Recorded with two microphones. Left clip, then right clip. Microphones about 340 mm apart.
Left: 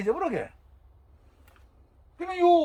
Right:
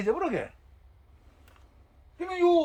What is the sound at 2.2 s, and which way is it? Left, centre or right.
Speech, centre.